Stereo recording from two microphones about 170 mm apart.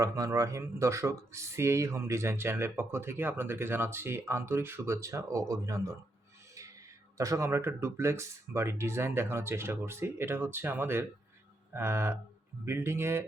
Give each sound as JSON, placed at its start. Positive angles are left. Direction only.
{"t": 0.0, "sound": "speech", "side_deg": -20}
{"t": 7.2, "sound": "speech", "side_deg": -15}